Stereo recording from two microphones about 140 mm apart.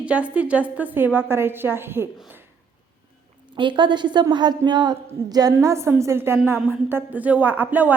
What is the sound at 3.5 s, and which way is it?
A woman's voice, 35° right (ahead or behind).